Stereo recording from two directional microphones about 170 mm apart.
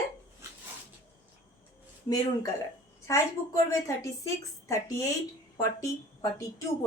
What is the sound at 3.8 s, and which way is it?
A woman's voice, 20° left (ahead or behind).